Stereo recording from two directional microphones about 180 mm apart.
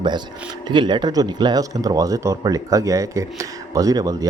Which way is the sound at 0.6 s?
25° right (ahead or behind).